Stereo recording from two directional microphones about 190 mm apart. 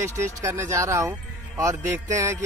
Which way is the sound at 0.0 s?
15° right (ahead or behind).